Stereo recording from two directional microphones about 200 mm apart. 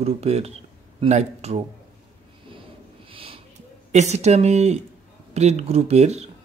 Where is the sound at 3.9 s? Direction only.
35° right (ahead or behind).